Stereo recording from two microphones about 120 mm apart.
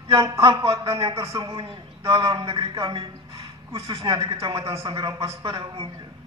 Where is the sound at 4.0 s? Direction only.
40° right (ahead or behind).